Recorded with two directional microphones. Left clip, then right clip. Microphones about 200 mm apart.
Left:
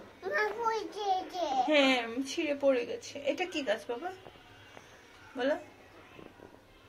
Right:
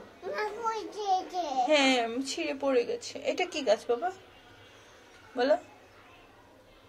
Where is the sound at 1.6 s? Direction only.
55° right (ahead or behind).